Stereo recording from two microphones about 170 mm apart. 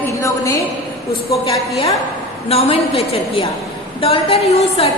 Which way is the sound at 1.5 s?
35° left (ahead or behind).